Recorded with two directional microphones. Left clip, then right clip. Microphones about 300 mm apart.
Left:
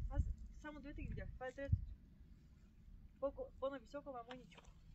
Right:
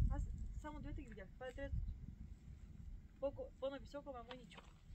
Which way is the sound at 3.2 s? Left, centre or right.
Centre.